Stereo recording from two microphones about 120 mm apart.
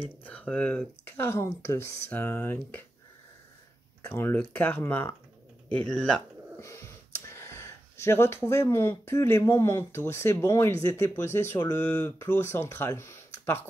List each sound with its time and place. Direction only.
0.2 s speech: 10° left (ahead or behind)
4.0 s speech: 20° left (ahead or behind)
5.9 s speech: 5° left (ahead or behind)
6.6 s speech: 25° left (ahead or behind)